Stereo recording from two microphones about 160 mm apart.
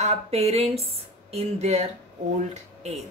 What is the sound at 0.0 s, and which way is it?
Speech, 40° right (ahead or behind).